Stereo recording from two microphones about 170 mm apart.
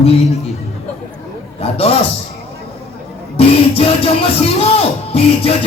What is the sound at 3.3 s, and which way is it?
Music, 35° left (ahead or behind).